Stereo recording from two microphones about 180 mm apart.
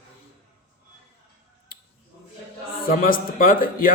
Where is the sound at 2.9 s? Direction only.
50° left (ahead or behind).